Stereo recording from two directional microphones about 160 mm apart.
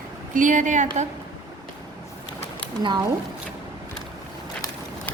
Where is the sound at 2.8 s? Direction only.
25° right (ahead or behind).